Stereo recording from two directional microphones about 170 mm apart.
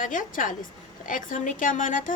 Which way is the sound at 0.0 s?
50° left (ahead or behind).